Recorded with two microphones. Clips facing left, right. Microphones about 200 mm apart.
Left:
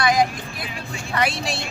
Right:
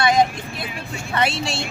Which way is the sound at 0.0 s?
25° right (ahead or behind).